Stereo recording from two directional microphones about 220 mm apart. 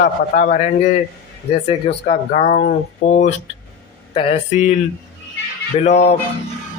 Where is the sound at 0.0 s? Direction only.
35° left (ahead or behind).